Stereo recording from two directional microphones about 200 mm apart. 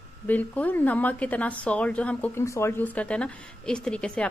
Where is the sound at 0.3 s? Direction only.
10° left (ahead or behind).